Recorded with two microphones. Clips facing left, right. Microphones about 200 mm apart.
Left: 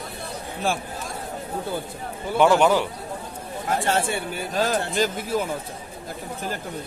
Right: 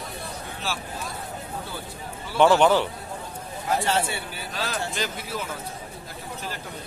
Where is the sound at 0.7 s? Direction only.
50° left (ahead or behind).